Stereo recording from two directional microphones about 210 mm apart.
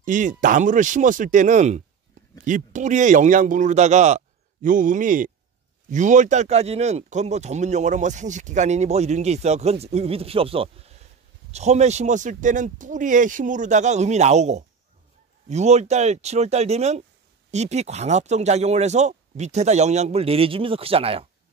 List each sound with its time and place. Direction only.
0.0 s speech: 40° right (ahead or behind)